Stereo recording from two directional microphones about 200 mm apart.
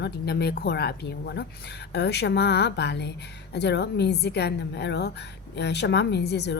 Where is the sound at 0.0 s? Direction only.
55° left (ahead or behind).